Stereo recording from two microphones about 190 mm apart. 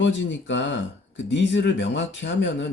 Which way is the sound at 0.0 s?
75° left (ahead or behind).